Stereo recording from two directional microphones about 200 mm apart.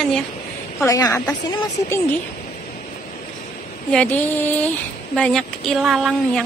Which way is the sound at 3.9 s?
10° left (ahead or behind).